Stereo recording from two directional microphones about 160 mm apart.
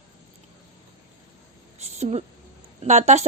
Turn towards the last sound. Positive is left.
turn(degrees=-45)  # may be behind; listen again after turning